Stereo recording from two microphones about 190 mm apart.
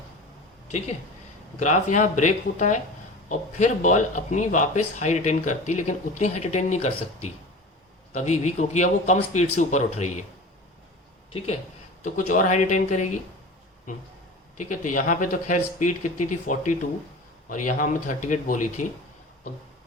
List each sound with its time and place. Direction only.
1.5 s speech: 40° left (ahead or behind)
11.3 s speech: 35° left (ahead or behind)